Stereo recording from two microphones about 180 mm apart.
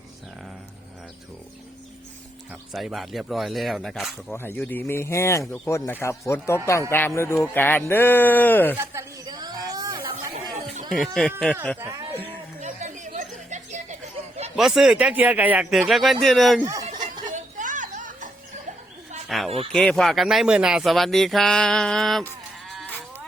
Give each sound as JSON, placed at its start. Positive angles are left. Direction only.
{"t": 2.7, "sound": "speech", "side_deg": 0}
{"t": 4.3, "sound": "speech", "side_deg": 10}
{"t": 8.7, "sound": "chatter", "side_deg": -15}
{"t": 10.9, "sound": "speech", "side_deg": 0}
{"t": 11.8, "sound": "speech", "side_deg": -15}
{"t": 12.5, "sound": "a sound", "side_deg": -40}
{"t": 14.5, "sound": "speech", "side_deg": 0}
{"t": 17.3, "sound": "a sound", "side_deg": -45}
{"t": 19.3, "sound": "speech", "side_deg": 0}